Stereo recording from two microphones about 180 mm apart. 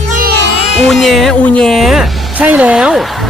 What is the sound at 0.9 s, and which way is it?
Speech, centre (ahead or behind).